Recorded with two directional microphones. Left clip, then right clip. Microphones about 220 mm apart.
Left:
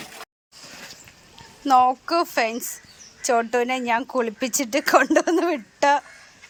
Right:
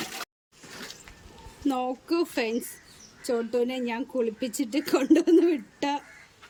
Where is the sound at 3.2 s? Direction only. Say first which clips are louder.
Left 6 dB; 25° left (ahead or behind).